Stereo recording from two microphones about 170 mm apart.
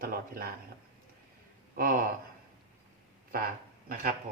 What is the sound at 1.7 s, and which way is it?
Speech, 55° right (ahead or behind).